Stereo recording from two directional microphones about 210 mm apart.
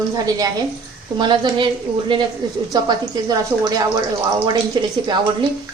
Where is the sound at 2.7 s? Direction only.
20° right (ahead or behind).